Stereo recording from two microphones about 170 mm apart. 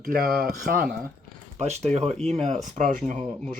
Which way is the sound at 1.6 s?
40° right (ahead or behind).